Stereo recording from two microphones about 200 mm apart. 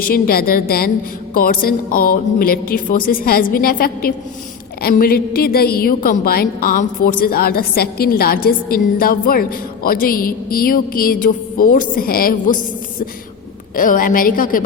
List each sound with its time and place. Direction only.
0.0 s a woman's voice: 50° left (ahead or behind)
13.7 s a woman's voice: 45° left (ahead or behind)